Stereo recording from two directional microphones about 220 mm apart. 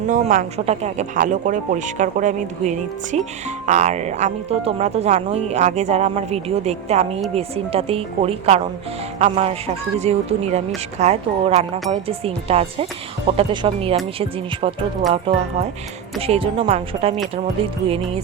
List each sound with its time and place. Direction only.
0.1 s speech: 35° right (ahead or behind)
15.3 s speech: 20° right (ahead or behind)